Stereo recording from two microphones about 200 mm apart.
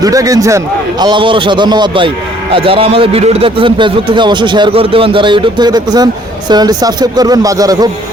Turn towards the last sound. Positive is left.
turn(degrees=-20)  # may be behind; listen again after turning